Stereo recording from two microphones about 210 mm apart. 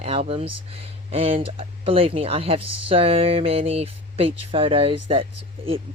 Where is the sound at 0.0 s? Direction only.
25° right (ahead or behind).